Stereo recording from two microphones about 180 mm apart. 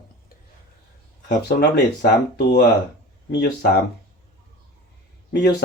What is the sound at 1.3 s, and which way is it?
Speech, 60° left (ahead or behind).